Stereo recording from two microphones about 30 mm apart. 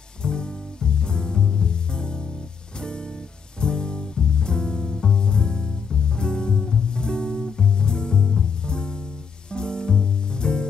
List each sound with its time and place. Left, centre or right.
0.2 s music: left
3.6 s music: left